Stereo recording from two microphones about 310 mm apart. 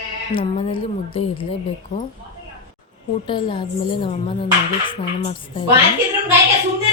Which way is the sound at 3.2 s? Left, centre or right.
Centre.